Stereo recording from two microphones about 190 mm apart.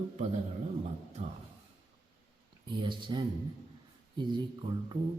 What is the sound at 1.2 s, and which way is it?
Speech, 35° right (ahead or behind).